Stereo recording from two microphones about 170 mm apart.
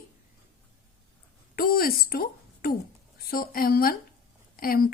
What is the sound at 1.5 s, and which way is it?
A woman's voice, 60° left (ahead or behind).